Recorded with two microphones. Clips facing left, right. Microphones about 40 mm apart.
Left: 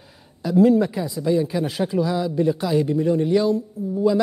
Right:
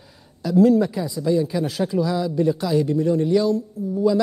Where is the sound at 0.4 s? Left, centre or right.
Left.